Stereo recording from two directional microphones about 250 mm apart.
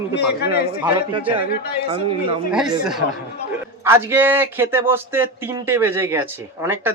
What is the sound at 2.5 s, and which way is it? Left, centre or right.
A man's voice, centre.